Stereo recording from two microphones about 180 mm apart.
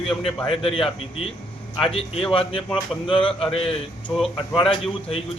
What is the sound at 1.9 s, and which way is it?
Speech, 30° left (ahead or behind).